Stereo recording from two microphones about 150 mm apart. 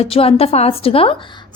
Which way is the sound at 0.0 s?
40° left (ahead or behind).